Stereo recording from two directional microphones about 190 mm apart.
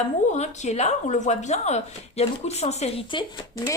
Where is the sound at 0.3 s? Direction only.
35° left (ahead or behind).